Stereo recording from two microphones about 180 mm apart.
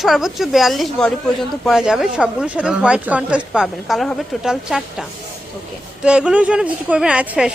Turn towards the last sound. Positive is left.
turn(degrees=-5)  # may be behind; listen again after turning